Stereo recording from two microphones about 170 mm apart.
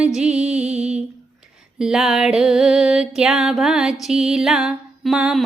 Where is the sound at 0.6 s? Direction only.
40° right (ahead or behind).